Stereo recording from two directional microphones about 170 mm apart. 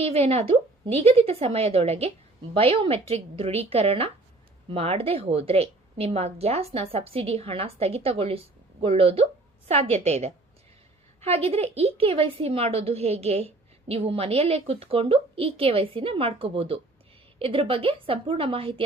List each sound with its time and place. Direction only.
0.0 s a woman's voice: 35° right (ahead or behind)